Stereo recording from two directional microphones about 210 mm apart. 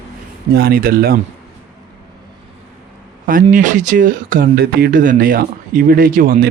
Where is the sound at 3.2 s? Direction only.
40° right (ahead or behind).